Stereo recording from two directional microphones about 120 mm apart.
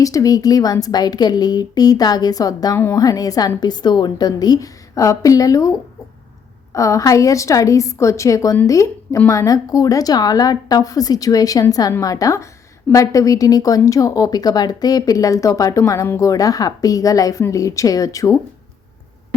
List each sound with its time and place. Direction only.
0.0 s a woman's voice: 30° left (ahead or behind)
6.7 s a woman's voice: 25° left (ahead or behind)